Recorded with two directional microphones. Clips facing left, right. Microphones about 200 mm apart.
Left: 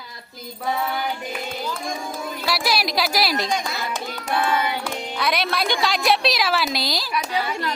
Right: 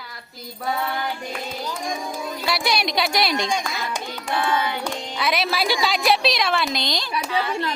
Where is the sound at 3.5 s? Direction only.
15° right (ahead or behind).